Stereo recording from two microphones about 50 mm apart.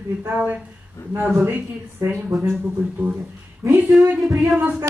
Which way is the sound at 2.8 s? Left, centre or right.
Right.